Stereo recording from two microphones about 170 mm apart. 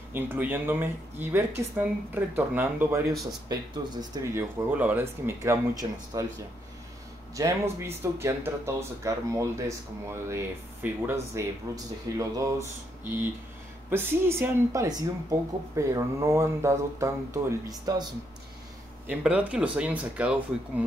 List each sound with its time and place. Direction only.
0.1 s speech: 10° right (ahead or behind)
3.1 s speech: centre (ahead or behind)
3.4 s speech: 25° right (ahead or behind)
7.3 s speech: 15° right (ahead or behind)
13.8 s speech: 15° right (ahead or behind)
19.0 s speech: 5° right (ahead or behind)